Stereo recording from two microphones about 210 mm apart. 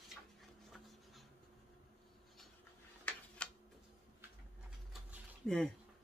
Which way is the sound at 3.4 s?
5° left (ahead or behind).